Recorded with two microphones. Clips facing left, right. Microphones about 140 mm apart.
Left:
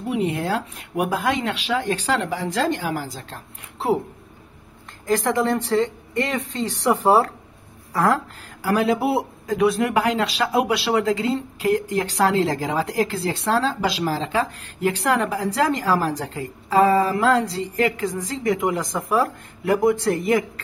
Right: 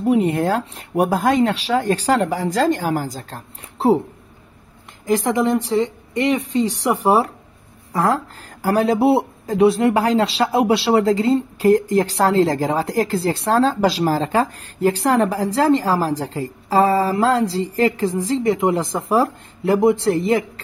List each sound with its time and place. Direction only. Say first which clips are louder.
0.0 s a woman's voice: right 6 dB; 45° right (ahead or behind)
5.0 s a woman's voice: right 3 dB; 15° right (ahead or behind)
8.6 s a woman's voice: right 4 dB; 35° right (ahead or behind)